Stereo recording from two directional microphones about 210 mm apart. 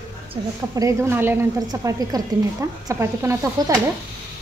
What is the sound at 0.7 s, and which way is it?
A woman's voice, 15° right (ahead or behind).